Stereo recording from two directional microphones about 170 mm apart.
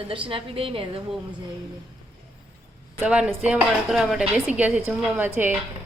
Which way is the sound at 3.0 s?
10° right (ahead or behind).